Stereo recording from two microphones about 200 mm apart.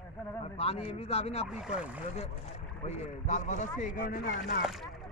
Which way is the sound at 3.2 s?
35° left (ahead or behind).